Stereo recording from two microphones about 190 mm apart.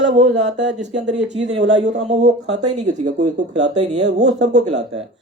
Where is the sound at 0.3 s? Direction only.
65° right (ahead or behind).